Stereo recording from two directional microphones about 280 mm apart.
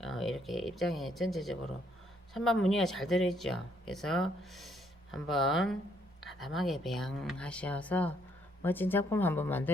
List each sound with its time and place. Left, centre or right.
0.0 s speech: centre